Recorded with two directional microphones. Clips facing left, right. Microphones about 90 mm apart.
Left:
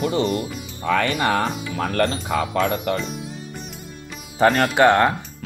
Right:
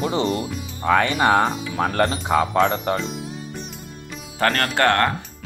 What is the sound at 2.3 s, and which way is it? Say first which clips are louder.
Speech: right 7 dB; 35° right (ahead or behind).